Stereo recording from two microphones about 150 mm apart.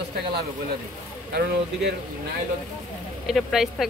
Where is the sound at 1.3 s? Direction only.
90° right.